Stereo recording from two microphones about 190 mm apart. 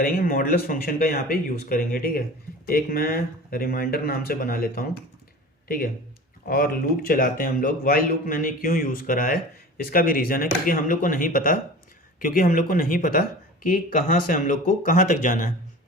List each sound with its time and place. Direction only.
0.0 s speech: 50° left (ahead or behind)